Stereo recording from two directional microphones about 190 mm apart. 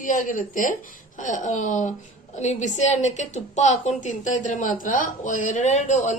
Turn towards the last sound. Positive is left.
turn(degrees=40)  # may be behind; listen again after turning